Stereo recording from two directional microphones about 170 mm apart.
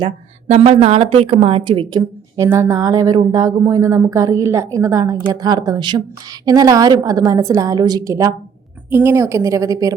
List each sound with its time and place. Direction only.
0.5 s a woman's voice: 40° right (ahead or behind)
2.0 s a woman's voice: 15° right (ahead or behind)